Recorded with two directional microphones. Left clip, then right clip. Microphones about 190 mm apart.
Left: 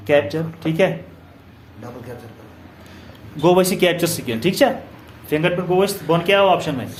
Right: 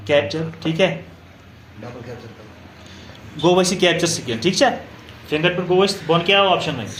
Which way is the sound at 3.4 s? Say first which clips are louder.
Left 1 dB; 40° left (ahead or behind).